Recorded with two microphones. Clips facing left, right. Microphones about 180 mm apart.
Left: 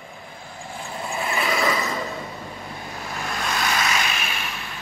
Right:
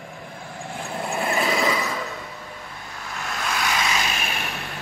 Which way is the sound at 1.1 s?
55° right (ahead or behind).